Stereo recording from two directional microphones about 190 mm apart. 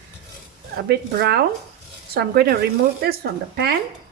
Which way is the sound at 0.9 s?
60° right (ahead or behind).